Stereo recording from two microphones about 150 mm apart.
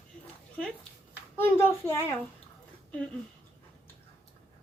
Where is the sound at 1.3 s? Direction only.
15° left (ahead or behind).